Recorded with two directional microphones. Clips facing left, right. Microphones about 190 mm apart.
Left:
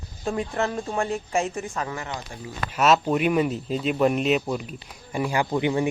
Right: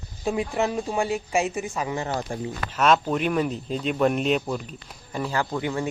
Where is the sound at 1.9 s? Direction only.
25° right (ahead or behind).